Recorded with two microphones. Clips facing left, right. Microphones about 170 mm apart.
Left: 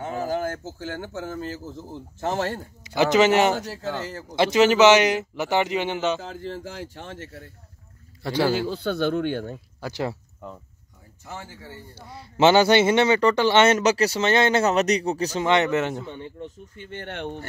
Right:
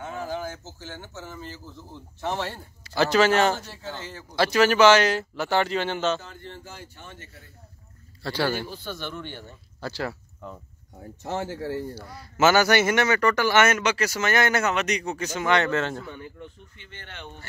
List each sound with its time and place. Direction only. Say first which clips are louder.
0.0 s speech: left 5 dB; 40° left (ahead or behind)
2.8 s speech: left 2 dB; 15° left (ahead or behind)
4.1 s speech: left 6 dB; 40° left (ahead or behind)
4.4 s speech: left 2 dB; 20° left (ahead or behind)
6.2 s speech: left 8 dB; 90° left
8.2 s speech: left 4 dB; 20° left (ahead or behind)
8.5 s speech: left 9 dB; 80° left; by 9.6 s 60° left (ahead or behind)
9.8 s speech: left 2 dB; 15° left (ahead or behind)
11.2 s speech: right 10 dB; 85° right
11.9 s speech: right 3 dB; 25° left (ahead or behind)
15.4 s speech: left 2 dB; 20° left (ahead or behind)
16.4 s speech: left 8 dB; 45° left (ahead or behind)